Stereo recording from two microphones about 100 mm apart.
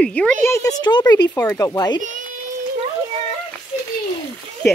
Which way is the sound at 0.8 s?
45° left (ahead or behind).